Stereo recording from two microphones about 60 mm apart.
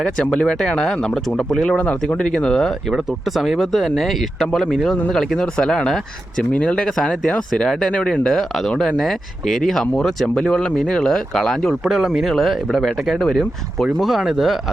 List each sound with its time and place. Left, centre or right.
0.0 s speech: centre
1.8 s speech: left
2.9 s speech: centre
11.9 s speech: centre